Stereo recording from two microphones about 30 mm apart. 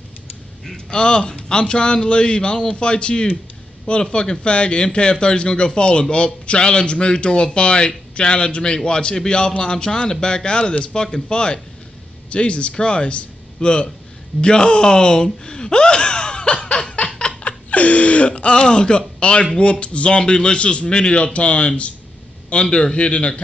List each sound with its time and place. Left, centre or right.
0.7 s a man's voice: left
17.4 s a sound: left
18.6 s a man's voice: left
20.2 s a man's voice: left
22.5 s a man's voice: left